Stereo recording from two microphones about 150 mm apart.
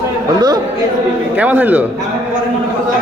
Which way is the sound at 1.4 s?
10° right (ahead or behind).